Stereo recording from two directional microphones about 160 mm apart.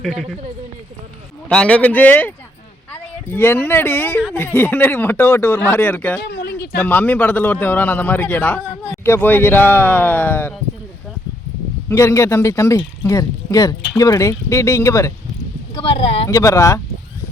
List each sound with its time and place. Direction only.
0.0 s speech: centre (ahead or behind)
1.5 s a man's voice: 5° left (ahead or behind)
6.2 s a sound: 90° left
6.8 s a man's voice: 10° left (ahead or behind)
11.9 s a man's voice: 15° left (ahead or behind)
15.7 s speech: 35° left (ahead or behind)
16.3 s speech: 20° left (ahead or behind)